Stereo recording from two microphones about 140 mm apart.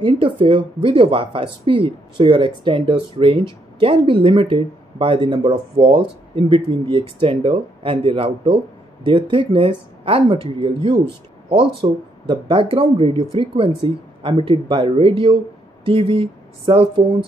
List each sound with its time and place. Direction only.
0.0 s speech: 40° right (ahead or behind)